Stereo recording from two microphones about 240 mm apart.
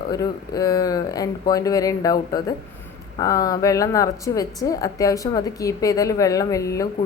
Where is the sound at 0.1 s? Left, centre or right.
Centre.